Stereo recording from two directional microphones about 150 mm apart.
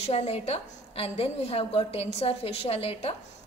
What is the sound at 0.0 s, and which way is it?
A woman's voice, 45° left (ahead or behind).